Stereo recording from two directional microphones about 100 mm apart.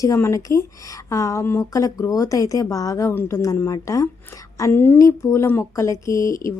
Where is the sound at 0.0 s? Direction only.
30° left (ahead or behind).